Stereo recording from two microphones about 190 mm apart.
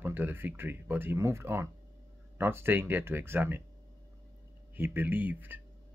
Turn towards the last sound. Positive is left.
turn(degrees=-10)  # may be behind; listen again after turning